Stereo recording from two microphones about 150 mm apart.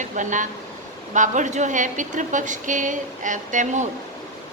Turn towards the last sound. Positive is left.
turn(degrees=-55)  # may be behind; listen again after turning